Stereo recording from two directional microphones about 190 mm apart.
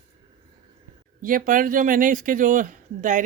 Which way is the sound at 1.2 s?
45° right (ahead or behind).